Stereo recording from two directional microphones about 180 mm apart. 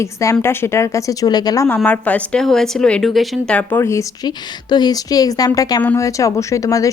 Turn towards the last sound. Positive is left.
turn(degrees=20)  # may be behind; listen again after turning